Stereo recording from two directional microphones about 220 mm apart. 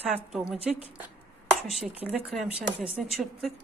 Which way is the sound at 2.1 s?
Centre (ahead or behind).